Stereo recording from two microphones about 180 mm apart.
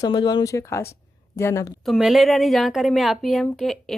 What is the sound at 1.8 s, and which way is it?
Speech, centre (ahead or behind).